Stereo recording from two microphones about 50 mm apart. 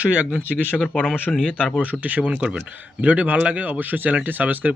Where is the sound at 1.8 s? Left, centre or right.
Right.